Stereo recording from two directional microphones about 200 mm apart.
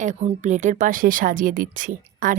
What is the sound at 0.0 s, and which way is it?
Speech, 35° right (ahead or behind).